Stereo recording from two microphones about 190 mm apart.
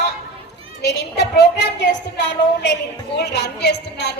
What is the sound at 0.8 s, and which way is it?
A woman's voice, 60° left (ahead or behind).